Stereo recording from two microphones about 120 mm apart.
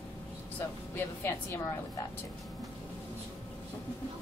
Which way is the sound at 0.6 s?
20° left (ahead or behind).